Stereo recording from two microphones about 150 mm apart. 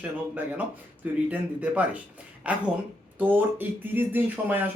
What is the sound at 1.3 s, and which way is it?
Speech, 10° right (ahead or behind).